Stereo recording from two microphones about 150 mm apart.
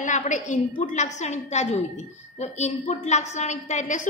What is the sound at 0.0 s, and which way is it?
A woman's voice, 55° left (ahead or behind).